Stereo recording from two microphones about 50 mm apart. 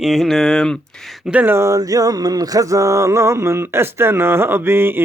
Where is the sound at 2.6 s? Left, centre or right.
Right.